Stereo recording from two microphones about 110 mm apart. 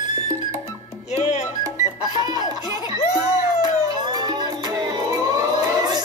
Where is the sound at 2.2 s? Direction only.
40° right (ahead or behind).